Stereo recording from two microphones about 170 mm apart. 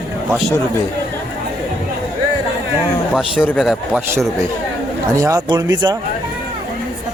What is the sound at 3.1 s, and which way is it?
A man's voice, 5° right (ahead or behind).